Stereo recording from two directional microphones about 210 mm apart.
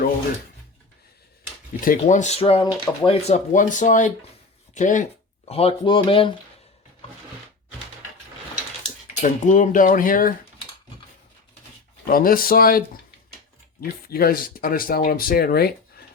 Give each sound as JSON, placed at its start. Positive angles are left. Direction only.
{"t": 1.8, "sound": "speech", "side_deg": 40}
{"t": 9.2, "sound": "speech", "side_deg": 35}
{"t": 12.0, "sound": "speech", "side_deg": 45}
{"t": 14.1, "sound": "speech", "side_deg": 45}